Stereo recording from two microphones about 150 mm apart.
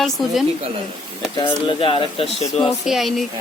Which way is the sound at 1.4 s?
35° left (ahead or behind).